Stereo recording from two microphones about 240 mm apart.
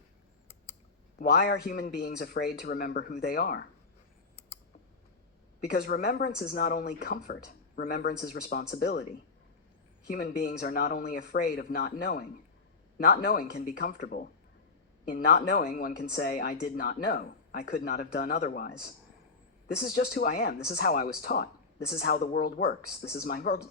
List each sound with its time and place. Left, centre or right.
1.2 s a woman's voice: left
5.5 s a woman's voice: left
10.1 s a woman's voice: left